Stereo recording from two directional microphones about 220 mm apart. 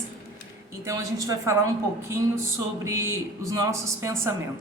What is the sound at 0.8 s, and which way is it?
Speech, 15° right (ahead or behind).